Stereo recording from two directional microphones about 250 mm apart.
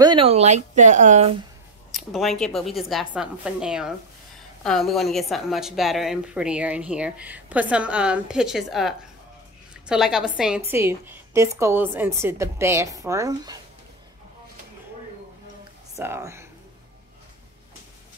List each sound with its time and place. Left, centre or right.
0.0 s speech: centre
1.9 s a woman's voice: centre
16.0 s a woman's voice: centre